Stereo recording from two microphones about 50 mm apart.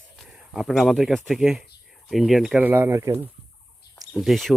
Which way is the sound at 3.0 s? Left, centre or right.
Right.